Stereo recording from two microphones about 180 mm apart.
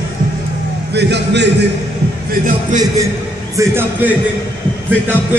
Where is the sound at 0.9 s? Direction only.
70° right (ahead or behind).